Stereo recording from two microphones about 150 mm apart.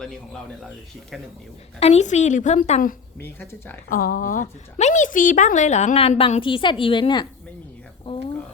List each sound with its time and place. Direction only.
1.8 s a woman's voice: 45° left (ahead or behind)
3.2 s speech: 15° left (ahead or behind)
3.8 s a woman's voice: 75° left (ahead or behind); by 7.3 s 30° left (ahead or behind)